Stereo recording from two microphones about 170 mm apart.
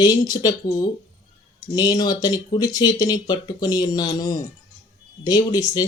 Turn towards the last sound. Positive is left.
turn(degrees=20)  # may be behind; listen again after turning